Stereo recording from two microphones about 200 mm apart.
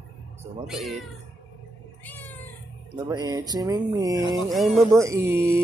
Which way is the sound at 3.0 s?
20° right (ahead or behind).